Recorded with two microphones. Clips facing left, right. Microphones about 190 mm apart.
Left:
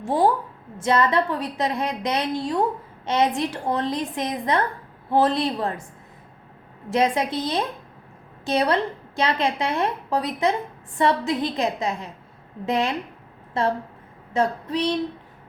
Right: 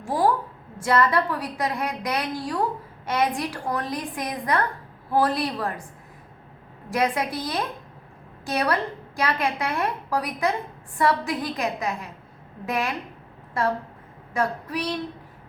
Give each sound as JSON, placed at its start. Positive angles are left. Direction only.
{"t": 0.0, "sound": "a woman's voice", "side_deg": 25}
{"t": 6.9, "sound": "a woman's voice", "side_deg": 25}
{"t": 14.3, "sound": "a woman's voice", "side_deg": 25}